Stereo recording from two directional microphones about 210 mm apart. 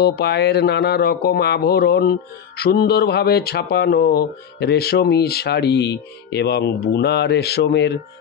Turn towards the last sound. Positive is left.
turn(degrees=55)  # may be behind; listen again after turning